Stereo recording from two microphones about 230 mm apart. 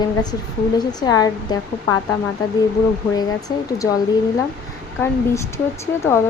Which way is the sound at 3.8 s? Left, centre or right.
Centre.